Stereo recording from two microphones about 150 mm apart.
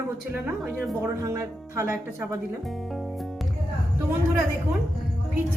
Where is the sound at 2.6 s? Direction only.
Centre (ahead or behind).